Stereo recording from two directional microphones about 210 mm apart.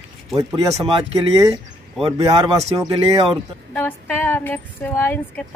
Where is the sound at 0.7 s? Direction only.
25° right (ahead or behind).